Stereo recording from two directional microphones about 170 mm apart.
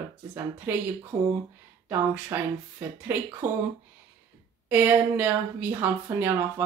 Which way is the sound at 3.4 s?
50° right (ahead or behind).